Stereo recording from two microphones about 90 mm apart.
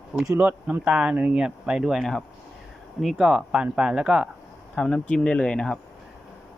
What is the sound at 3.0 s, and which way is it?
Speech, 5° right (ahead or behind).